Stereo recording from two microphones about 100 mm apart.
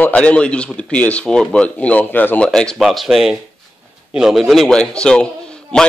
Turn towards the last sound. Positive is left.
turn(degrees=10)  # may be behind; listen again after turning